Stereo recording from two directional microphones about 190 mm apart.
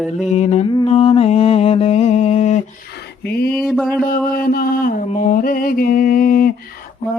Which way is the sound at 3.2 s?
55° left (ahead or behind).